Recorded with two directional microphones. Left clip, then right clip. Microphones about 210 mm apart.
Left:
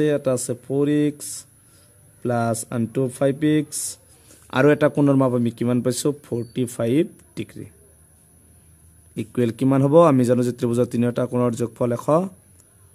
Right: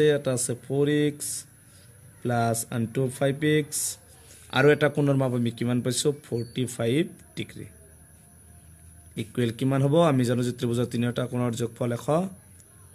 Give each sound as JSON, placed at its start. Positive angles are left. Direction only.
{"t": 0.0, "sound": "speech", "side_deg": 50}
{"t": 9.1, "sound": "a man's voice", "side_deg": 55}